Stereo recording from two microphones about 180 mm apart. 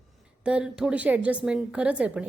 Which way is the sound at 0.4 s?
5° right (ahead or behind).